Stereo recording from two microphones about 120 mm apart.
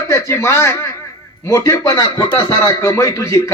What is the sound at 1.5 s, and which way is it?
A man's voice, 30° left (ahead or behind).